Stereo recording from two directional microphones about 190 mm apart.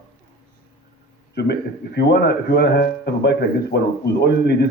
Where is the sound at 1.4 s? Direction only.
60° left (ahead or behind).